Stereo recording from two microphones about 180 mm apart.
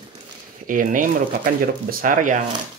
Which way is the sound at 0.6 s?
50° right (ahead or behind).